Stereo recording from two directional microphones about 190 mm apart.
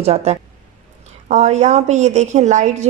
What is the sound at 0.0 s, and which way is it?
A woman's voice, 35° right (ahead or behind).